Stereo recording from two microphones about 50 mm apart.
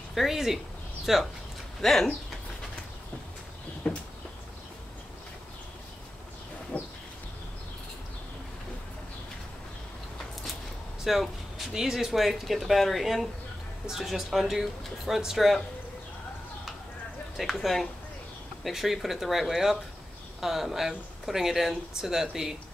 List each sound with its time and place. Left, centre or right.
0.1 s speech: centre
1.8 s speech: centre
3.8 s a sound: centre
6.7 s a sound: left
11.1 s speech: centre
17.4 s speech: centre